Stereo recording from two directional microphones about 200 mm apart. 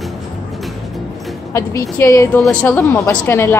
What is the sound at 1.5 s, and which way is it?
A woman's voice, 15° left (ahead or behind).